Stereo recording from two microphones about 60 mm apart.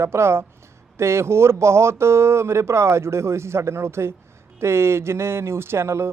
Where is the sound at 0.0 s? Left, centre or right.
Right.